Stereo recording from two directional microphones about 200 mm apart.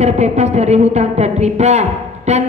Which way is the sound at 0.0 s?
35° right (ahead or behind).